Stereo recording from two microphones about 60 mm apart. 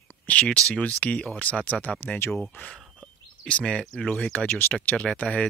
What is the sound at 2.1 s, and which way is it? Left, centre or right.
Speech, left.